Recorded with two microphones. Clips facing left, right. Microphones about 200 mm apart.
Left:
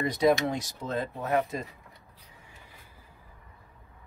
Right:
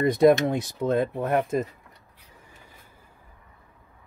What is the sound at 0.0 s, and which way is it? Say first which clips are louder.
Speech: right 6 dB; 55° right (ahead or behind).